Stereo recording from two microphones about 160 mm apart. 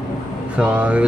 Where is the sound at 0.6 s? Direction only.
5° right (ahead or behind).